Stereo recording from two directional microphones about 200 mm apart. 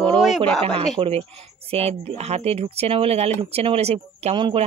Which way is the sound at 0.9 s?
30° right (ahead or behind).